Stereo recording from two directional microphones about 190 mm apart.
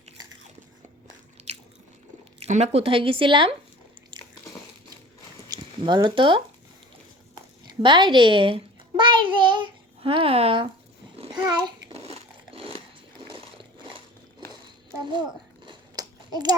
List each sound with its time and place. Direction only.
1.4 s biting: 35° right (ahead or behind)
2.5 s speech: 35° right (ahead or behind)
4.1 s biting: 25° right (ahead or behind)
5.5 s zipper: 20° right (ahead or behind)
7.7 s a child's voice: 25° right (ahead or behind)
11.2 s babbling: 20° right (ahead or behind)
15.6 s a sound: 20° right (ahead or behind)